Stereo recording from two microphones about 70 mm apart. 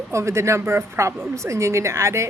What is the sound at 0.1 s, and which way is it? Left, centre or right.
A woman's voice, right.